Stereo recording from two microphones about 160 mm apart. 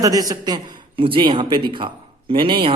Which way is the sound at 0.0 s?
25° right (ahead or behind).